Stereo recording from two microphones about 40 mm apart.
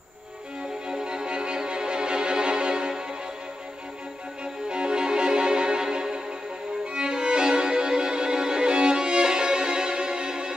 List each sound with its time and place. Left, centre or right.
0.8 s music: right
4.6 s music: right